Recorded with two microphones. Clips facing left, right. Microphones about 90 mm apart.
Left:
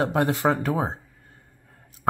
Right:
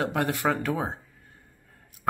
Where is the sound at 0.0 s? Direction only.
25° left (ahead or behind).